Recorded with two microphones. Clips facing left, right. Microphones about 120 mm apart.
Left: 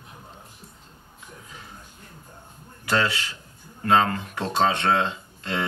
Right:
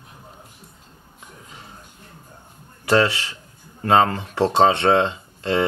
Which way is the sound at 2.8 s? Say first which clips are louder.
Right 6 dB; 25° right (ahead or behind).